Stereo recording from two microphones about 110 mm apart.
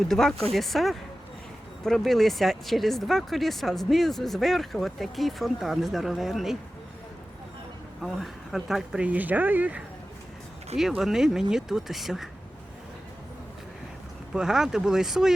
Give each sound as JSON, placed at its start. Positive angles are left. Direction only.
{"t": 0.1, "sound": "speech", "side_deg": 5}
{"t": 8.0, "sound": "speech", "side_deg": 0}
{"t": 10.8, "sound": "speech", "side_deg": -5}
{"t": 14.3, "sound": "speech", "side_deg": -5}